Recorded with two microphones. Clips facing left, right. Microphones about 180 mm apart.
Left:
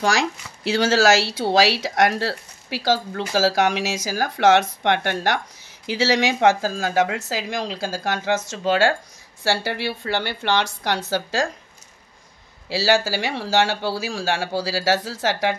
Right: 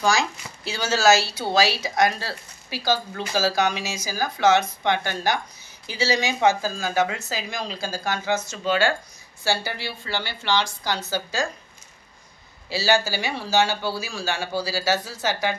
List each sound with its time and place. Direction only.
0.7 s speech: 90° left; by 5.4 s 75° left (ahead or behind)
5.9 s a woman's voice: 90° left; by 11.0 s 65° left (ahead or behind)
11.1 s speech: 80° left
12.6 s speech: 90° left